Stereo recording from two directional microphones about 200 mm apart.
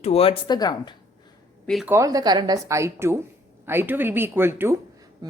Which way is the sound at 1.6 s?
Centre (ahead or behind).